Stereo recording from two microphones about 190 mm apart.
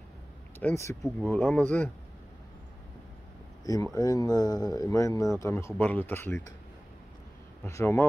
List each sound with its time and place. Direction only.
0.6 s speech: 10° left (ahead or behind)
3.6 s speech: 20° left (ahead or behind)
7.6 s speech: 15° left (ahead or behind)